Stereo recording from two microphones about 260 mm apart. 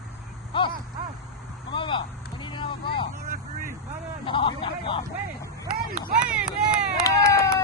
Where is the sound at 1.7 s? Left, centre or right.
Centre.